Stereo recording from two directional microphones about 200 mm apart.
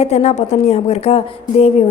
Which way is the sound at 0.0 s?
35° left (ahead or behind).